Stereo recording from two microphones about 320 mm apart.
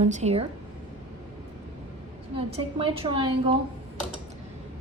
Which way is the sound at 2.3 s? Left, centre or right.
Centre.